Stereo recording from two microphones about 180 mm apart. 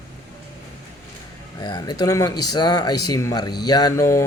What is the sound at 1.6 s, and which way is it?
Speech, 20° left (ahead or behind).